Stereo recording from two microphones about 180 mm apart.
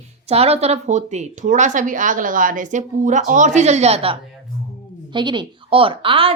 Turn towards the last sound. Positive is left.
turn(degrees=-30)  # may be behind; listen again after turning